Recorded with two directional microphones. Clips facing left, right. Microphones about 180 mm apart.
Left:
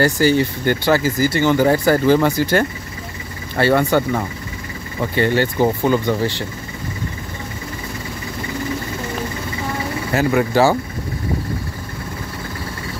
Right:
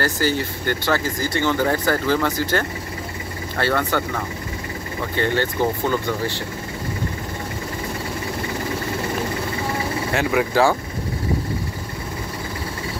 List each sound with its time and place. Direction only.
0.0 s speech: 15° left (ahead or behind)
5.1 s speech: 10° left (ahead or behind)
10.1 s speech: centre (ahead or behind)